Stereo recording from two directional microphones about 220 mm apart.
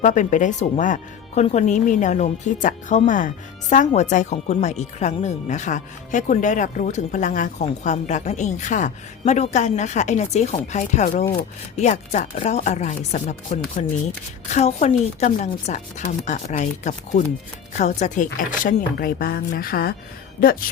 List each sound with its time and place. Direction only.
0.0 s speech: 35° left (ahead or behind)